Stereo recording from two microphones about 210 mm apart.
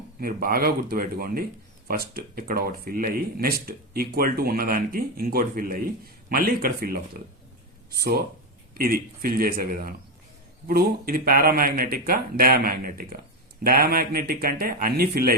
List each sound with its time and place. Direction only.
0.2 s speech: 45° right (ahead or behind)